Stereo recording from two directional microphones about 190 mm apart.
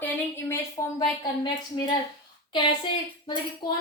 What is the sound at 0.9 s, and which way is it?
Speech, 20° left (ahead or behind).